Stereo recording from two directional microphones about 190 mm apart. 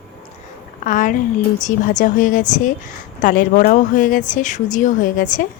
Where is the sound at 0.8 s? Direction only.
45° left (ahead or behind).